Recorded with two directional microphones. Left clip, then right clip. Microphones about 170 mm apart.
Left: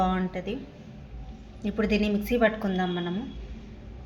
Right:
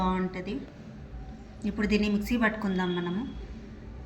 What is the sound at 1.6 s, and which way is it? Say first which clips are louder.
A woman's voice: left 2 dB; 45° left (ahead or behind).